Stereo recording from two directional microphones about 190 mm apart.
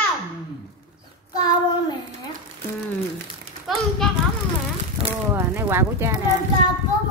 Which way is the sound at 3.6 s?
Centre (ahead or behind).